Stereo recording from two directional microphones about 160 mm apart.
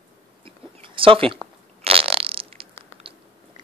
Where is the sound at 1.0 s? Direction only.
35° right (ahead or behind).